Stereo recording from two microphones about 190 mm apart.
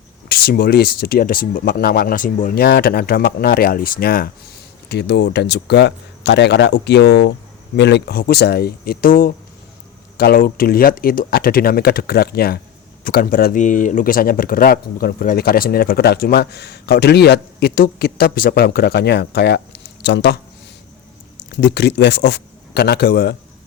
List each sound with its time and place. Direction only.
0.3 s speech: 55° left (ahead or behind)
21.5 s speech: 60° left (ahead or behind)